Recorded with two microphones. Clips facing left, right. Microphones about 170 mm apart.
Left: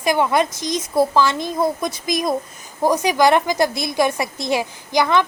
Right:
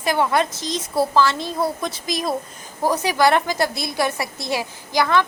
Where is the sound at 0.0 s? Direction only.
15° left (ahead or behind).